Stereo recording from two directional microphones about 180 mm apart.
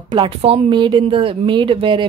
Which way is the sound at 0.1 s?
30° right (ahead or behind).